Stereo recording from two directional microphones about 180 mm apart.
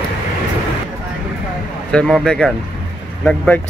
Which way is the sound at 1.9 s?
5° left (ahead or behind).